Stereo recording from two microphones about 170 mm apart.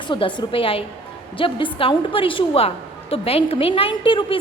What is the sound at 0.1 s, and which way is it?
A woman's voice, 30° left (ahead or behind).